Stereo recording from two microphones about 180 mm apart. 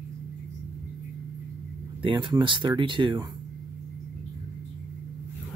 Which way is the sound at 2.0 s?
25° right (ahead or behind).